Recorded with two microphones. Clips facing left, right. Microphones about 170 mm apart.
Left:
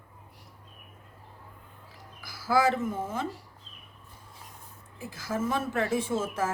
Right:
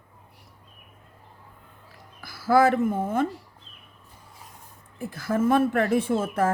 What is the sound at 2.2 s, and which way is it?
A woman's voice, 55° right (ahead or behind).